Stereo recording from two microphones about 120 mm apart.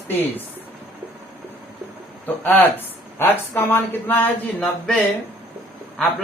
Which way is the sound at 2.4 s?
15° left (ahead or behind).